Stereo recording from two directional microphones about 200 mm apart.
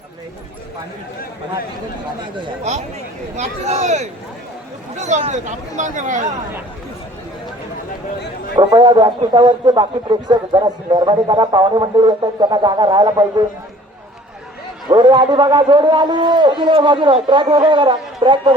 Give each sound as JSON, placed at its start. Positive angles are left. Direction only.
{"t": 3.3, "sound": "speech", "side_deg": -35}
{"t": 8.5, "sound": "a man's voice", "side_deg": -20}
{"t": 14.8, "sound": "a man's voice", "side_deg": -20}